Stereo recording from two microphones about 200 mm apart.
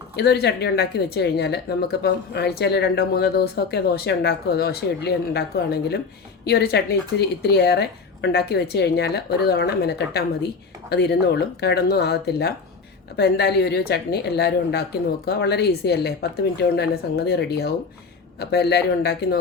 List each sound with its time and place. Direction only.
0.2 s a woman's voice: 55° left (ahead or behind)